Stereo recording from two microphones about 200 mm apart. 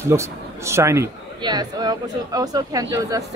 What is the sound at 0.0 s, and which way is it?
A woman's voice, 15° right (ahead or behind).